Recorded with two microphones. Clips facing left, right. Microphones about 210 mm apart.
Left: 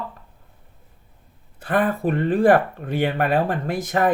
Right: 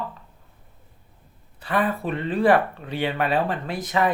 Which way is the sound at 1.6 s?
50° left (ahead or behind).